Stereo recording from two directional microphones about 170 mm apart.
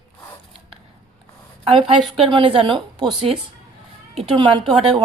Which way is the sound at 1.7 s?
35° right (ahead or behind).